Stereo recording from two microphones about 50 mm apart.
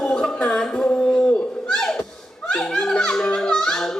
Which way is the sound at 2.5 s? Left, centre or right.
Left.